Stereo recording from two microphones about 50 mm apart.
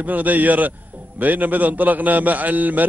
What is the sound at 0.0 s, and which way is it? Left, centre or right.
A man's voice, right.